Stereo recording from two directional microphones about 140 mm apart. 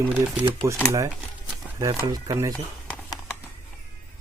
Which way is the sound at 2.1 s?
25° right (ahead or behind).